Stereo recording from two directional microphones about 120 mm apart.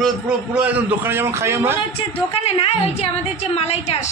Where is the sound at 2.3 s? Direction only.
55° left (ahead or behind).